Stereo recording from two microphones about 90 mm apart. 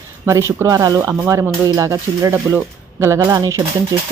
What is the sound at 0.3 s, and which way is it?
Speech, 35° right (ahead or behind).